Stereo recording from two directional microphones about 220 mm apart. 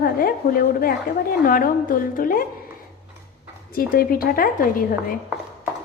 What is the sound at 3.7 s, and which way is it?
A woman's voice, 40° left (ahead or behind).